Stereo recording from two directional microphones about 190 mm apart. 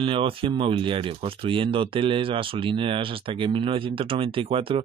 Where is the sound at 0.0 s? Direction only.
30° right (ahead or behind).